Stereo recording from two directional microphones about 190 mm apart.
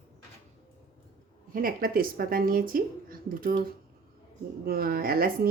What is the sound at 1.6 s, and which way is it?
Speech, 50° right (ahead or behind).